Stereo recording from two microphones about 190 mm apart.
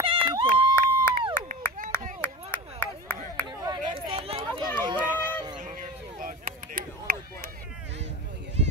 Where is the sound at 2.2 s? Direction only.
10° left (ahead or behind).